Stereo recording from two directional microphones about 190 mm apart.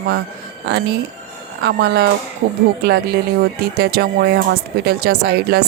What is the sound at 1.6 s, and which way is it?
Speech, 60° right (ahead or behind).